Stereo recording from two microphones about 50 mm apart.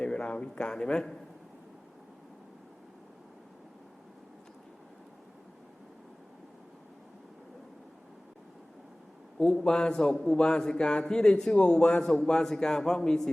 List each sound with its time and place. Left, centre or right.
0.0 s speech: left
9.6 s a man's voice: centre